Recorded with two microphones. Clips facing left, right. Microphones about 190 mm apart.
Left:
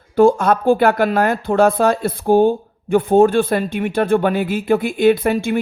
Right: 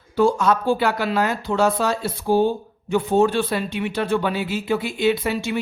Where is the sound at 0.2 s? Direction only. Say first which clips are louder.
Left 5 dB; 55° left (ahead or behind).